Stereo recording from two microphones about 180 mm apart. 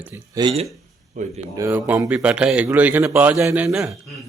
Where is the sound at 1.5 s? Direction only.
15° right (ahead or behind).